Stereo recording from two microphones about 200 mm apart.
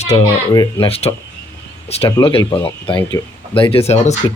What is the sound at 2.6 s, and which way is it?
Speech, 25° left (ahead or behind).